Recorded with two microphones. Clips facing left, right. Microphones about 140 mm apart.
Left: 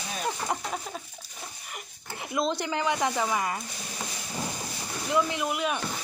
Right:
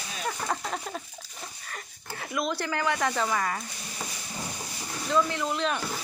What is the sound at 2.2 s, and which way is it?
Speech, 25° left (ahead or behind).